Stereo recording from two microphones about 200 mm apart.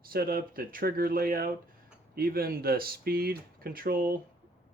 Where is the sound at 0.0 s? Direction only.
50° right (ahead or behind).